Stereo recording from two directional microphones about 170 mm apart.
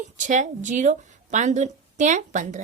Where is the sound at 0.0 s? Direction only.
45° right (ahead or behind).